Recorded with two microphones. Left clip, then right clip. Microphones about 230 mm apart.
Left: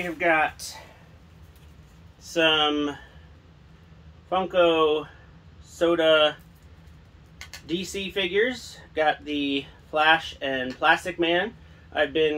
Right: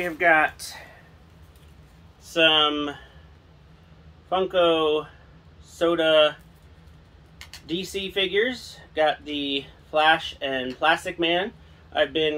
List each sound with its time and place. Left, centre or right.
0.0 s speech: centre
2.3 s speech: centre
4.3 s speech: centre
7.3 s speech: centre